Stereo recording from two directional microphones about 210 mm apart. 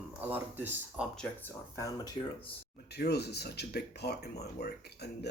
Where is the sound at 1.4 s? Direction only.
15° left (ahead or behind).